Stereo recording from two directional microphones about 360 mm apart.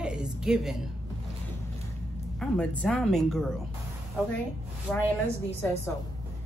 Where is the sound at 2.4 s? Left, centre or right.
Centre.